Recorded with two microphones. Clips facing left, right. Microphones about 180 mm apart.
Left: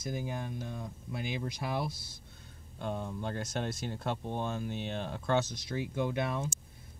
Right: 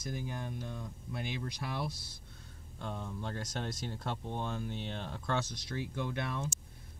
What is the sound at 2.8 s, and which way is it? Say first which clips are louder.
Speech: left 4 dB; 15° left (ahead or behind).